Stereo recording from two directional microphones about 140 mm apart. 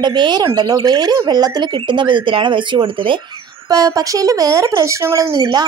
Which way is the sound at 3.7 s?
25° right (ahead or behind).